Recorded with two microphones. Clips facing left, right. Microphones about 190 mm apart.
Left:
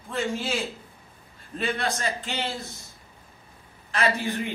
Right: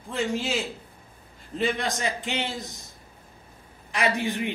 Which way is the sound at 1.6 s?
15° right (ahead or behind).